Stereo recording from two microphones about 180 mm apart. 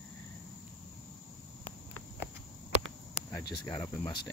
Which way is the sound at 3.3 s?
15° left (ahead or behind).